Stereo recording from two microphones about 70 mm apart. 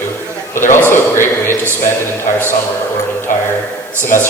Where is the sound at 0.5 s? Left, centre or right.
Left.